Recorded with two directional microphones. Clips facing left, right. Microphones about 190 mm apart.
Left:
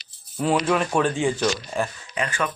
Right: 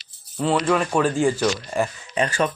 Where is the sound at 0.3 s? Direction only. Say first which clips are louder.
Right 1 dB; 10° left (ahead or behind).